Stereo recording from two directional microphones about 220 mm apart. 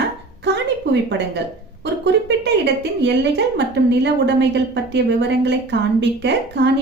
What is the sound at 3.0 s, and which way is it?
A woman's voice, 55° right (ahead or behind).